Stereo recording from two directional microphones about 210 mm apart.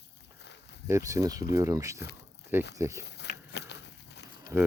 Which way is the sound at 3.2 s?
55° left (ahead or behind).